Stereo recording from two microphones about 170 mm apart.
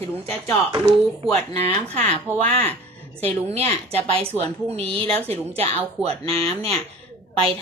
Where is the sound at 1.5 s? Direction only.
40° right (ahead or behind).